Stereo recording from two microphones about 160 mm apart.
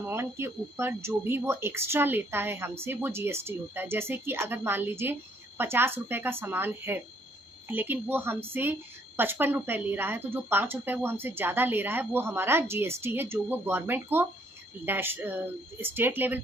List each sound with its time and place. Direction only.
0.0 s speech: 15° right (ahead or behind)